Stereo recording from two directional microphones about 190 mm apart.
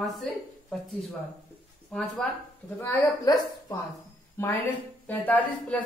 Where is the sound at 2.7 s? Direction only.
15° left (ahead or behind).